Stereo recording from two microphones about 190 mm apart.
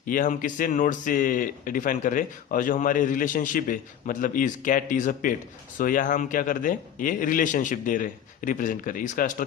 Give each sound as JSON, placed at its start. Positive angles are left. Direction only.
{"t": 0.1, "sound": "speech", "side_deg": 45}